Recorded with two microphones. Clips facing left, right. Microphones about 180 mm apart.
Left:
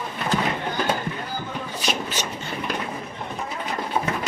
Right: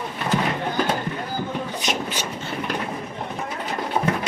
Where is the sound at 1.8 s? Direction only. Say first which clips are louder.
Right 1 dB; 15° right (ahead or behind).